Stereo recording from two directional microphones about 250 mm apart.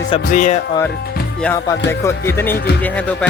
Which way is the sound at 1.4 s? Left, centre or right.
Centre.